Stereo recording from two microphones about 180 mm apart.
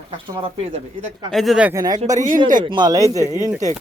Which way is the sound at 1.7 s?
20° right (ahead or behind).